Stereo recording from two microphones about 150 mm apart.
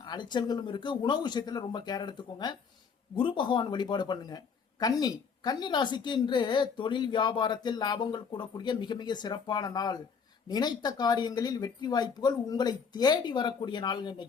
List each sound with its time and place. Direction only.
0.0 s speech: 30° left (ahead or behind)